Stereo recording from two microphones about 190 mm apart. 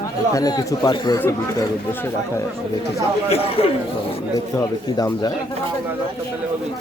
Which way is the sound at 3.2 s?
30° left (ahead or behind).